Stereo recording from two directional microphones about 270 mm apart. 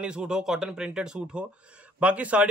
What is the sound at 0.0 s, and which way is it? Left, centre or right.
A man's voice, centre.